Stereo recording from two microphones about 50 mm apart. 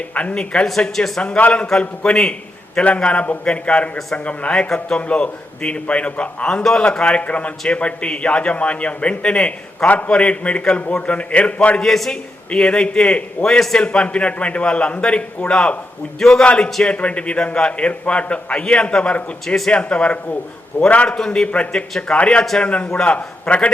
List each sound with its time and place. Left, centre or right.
0.1 s a man's voice: left
0.3 s a man's voice: centre
0.8 s a man's voice: centre
1.4 s a man's voice: left
6.5 s a man's voice: centre
11.8 s a man's voice: centre
12.5 s a man's voice: left
13.7 s a man's voice: left
16.8 s a man's voice: left
21.2 s a man's voice: centre